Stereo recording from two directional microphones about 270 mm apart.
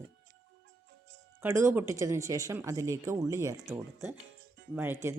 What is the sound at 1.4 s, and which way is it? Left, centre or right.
Speech, centre.